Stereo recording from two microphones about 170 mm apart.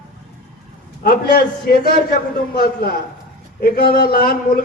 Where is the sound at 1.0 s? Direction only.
65° left (ahead or behind).